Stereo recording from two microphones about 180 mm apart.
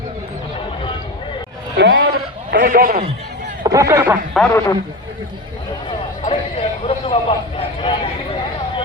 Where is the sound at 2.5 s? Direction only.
50° right (ahead or behind).